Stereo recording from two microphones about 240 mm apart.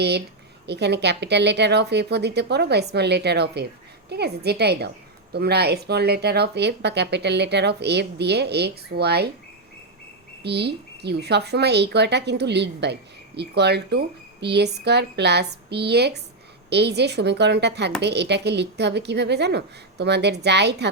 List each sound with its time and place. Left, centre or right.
0.7 s speech: right
10.4 s speech: right